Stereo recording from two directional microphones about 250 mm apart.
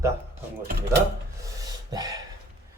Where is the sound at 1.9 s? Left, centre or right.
Centre.